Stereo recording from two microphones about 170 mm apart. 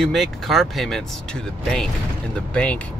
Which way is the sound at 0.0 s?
Centre (ahead or behind).